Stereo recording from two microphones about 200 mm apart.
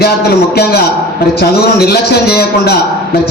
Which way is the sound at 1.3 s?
55° left (ahead or behind).